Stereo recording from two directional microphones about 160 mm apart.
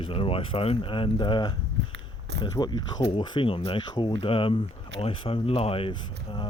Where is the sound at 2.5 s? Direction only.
25° left (ahead or behind).